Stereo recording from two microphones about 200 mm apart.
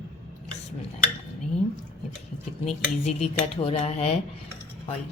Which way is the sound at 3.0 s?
30° left (ahead or behind).